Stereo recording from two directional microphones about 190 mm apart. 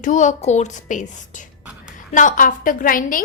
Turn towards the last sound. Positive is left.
turn(degrees=45)  # may be behind; listen again after turning